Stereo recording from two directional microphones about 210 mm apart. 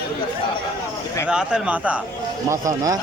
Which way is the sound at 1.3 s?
5° right (ahead or behind).